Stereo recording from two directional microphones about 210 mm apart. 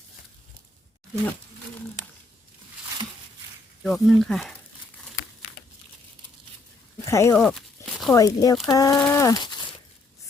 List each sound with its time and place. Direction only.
3.8 s speech: centre (ahead or behind)
7.0 s speech: 15° left (ahead or behind)
7.8 s a sound: 15° left (ahead or behind)
8.1 s speech: 15° left (ahead or behind)